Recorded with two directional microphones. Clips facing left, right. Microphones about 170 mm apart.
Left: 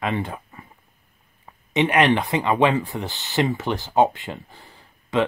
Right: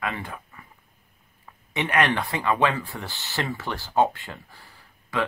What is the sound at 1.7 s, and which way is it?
Speech, 20° left (ahead or behind).